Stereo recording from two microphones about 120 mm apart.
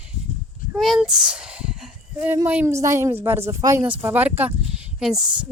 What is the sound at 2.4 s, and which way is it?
Speech, 15° right (ahead or behind).